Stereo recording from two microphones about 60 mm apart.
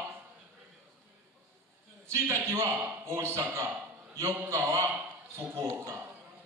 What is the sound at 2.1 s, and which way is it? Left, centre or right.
A man's voice, right.